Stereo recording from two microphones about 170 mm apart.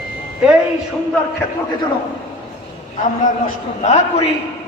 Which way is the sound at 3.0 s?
45° left (ahead or behind).